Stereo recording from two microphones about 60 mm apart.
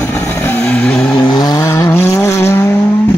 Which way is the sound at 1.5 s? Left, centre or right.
Left.